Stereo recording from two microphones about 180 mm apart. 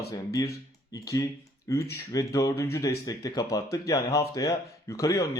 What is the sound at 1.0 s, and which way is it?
Speech, 20° left (ahead or behind).